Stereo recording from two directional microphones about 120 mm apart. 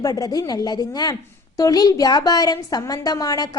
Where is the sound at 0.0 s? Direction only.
30° left (ahead or behind).